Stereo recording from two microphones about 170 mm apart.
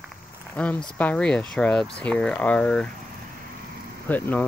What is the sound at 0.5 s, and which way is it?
Speech, 10° left (ahead or behind).